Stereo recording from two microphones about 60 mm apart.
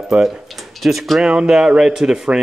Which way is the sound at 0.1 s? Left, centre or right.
Centre.